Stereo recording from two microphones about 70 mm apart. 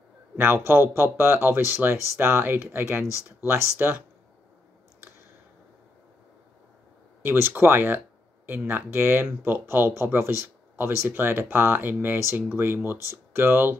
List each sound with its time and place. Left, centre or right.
0.4 s speech: right
7.2 s speech: right